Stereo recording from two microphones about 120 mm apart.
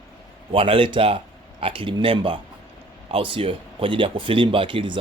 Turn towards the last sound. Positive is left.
turn(degrees=-45)  # may be behind; listen again after turning